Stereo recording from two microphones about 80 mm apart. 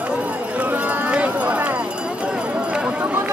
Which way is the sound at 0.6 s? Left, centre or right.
Centre.